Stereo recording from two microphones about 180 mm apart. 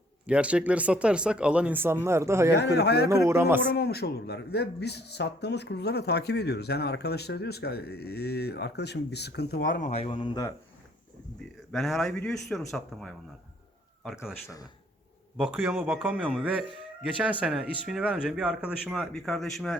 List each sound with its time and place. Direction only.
0.3 s speech: 5° right (ahead or behind)
2.5 s speech: 70° left (ahead or behind)
3.1 s speech: 15° right (ahead or behind)
3.7 s speech: 60° left (ahead or behind)
9.9 s speech: 30° left (ahead or behind)
11.7 s a man's voice: centre (ahead or behind)
14.4 s speech: 20° left (ahead or behind)
15.4 s a man's voice: 5° right (ahead or behind)